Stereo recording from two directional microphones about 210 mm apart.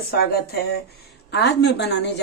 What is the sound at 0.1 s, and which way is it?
Speech, 45° left (ahead or behind).